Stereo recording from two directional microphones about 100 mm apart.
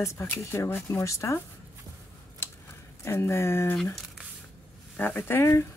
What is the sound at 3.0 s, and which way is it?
Speech, 25° left (ahead or behind).